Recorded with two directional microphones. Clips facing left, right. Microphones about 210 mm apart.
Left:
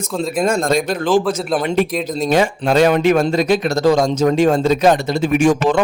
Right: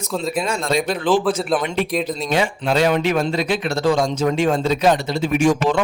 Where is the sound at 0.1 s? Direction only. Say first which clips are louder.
Left 1 dB; centre (ahead or behind).